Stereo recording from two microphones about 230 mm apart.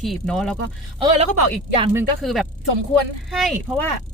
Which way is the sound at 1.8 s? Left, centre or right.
Centre.